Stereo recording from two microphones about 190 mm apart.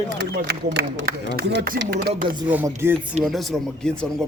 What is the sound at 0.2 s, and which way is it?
A man's voice, 60° right (ahead or behind).